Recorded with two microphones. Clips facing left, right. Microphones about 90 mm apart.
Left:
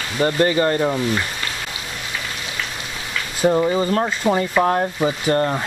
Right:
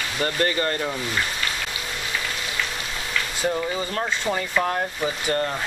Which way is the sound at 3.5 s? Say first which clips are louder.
Left 10 dB; 30° left (ahead or behind).